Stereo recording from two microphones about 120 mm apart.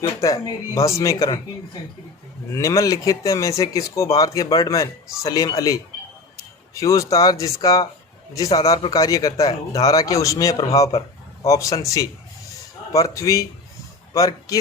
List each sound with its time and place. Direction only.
0.2 s speech: 30° left (ahead or behind)
2.5 s a man's voice: 25° left (ahead or behind)